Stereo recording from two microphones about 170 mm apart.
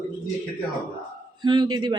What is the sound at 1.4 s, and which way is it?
Speech, 25° right (ahead or behind).